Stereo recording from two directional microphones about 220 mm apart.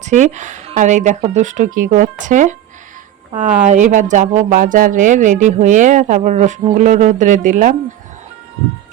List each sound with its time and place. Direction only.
0.0 s speech: 35° right (ahead or behind)
3.6 s speech: 35° right (ahead or behind)